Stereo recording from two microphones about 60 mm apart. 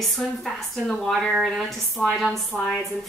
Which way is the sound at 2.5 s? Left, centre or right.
Centre.